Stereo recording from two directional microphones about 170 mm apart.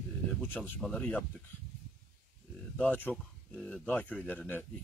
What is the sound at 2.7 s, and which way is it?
Speech, 10° left (ahead or behind).